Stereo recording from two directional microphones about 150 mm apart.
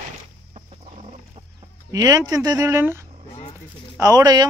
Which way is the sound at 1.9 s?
25° right (ahead or behind).